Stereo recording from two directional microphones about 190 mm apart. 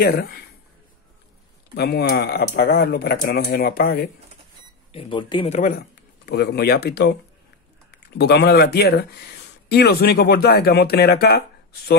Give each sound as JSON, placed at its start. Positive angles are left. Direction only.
{"t": 0.0, "sound": "speech", "side_deg": 55}
{"t": 1.8, "sound": "speech", "side_deg": 60}
{"t": 4.9, "sound": "speech", "side_deg": 25}
{"t": 5.6, "sound": "speech", "side_deg": 50}